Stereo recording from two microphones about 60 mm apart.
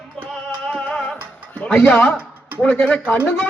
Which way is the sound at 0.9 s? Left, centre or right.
Centre.